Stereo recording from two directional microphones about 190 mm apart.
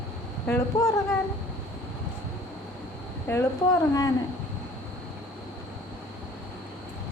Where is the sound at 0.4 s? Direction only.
10° left (ahead or behind).